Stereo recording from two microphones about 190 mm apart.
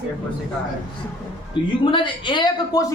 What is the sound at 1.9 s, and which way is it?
Speech, 25° left (ahead or behind).